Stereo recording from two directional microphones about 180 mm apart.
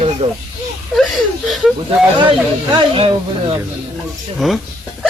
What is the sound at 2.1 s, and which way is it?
Speech, 25° right (ahead or behind).